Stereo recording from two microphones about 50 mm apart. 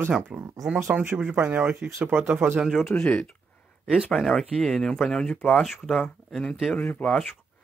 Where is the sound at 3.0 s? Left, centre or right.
Centre.